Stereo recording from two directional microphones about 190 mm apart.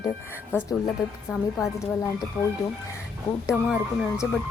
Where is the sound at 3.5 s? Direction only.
5° right (ahead or behind).